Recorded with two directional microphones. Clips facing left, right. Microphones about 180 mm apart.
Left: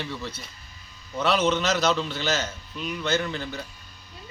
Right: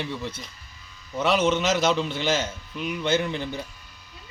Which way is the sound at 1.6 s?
20° right (ahead or behind).